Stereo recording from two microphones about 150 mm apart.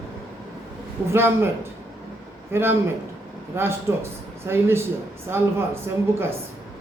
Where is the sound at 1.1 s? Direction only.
15° right (ahead or behind).